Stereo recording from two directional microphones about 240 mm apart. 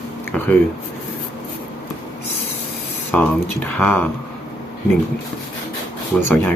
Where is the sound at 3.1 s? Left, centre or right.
Centre.